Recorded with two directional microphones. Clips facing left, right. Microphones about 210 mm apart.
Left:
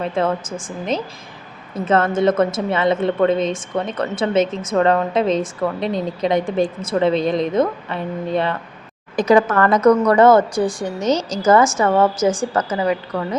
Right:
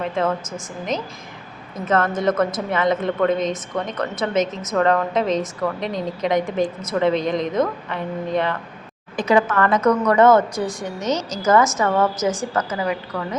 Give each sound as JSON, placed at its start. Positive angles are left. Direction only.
{"t": 0.2, "sound": "a woman's voice", "side_deg": 30}